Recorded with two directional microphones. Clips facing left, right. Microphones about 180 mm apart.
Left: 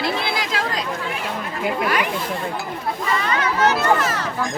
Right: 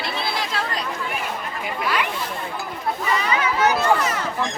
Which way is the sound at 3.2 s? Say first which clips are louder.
Left 2 dB; 15° right (ahead or behind).